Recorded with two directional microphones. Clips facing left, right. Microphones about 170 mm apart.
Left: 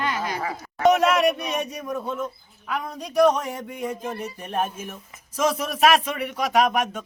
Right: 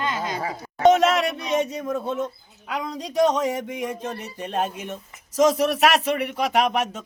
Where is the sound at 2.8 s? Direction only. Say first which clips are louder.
Left 1 dB; 90° right.